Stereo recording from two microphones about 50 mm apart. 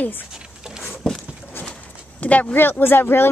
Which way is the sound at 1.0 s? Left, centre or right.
Centre.